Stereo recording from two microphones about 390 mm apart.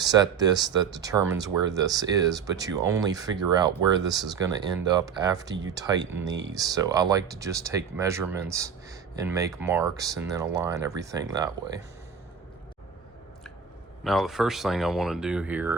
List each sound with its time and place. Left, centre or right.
0.0 s speech: centre
6.1 s speech: right
6.5 s speech: centre
14.0 s speech: centre